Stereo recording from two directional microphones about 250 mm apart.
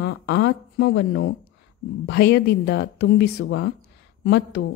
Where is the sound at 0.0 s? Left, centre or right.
Left.